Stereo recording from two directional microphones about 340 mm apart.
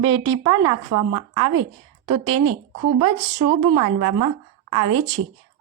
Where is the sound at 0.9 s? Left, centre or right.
Right.